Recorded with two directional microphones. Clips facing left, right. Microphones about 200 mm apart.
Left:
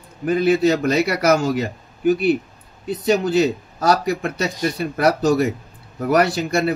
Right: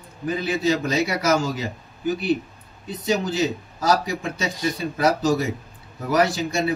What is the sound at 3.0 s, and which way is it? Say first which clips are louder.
Speech: left 5 dB; 65° left (ahead or behind).